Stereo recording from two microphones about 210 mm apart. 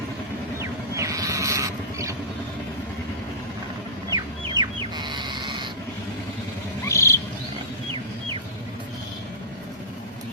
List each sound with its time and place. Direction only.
0.6 s a sound: 15° right (ahead or behind)
4.1 s goat: 20° right (ahead or behind)
6.8 s insect: 15° left (ahead or behind)